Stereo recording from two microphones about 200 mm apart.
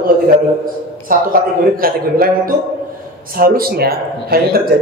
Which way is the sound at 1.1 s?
45° right (ahead or behind).